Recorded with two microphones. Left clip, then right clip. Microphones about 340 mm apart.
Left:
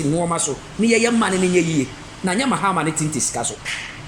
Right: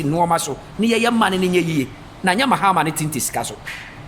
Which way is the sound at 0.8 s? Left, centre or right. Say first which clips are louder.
Even; centre.